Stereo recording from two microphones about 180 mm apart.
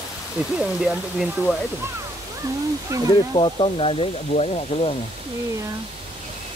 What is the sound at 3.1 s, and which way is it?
Speech, 30° left (ahead or behind).